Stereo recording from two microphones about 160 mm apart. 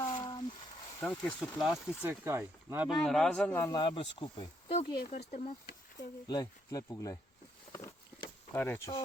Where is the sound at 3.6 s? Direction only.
30° left (ahead or behind).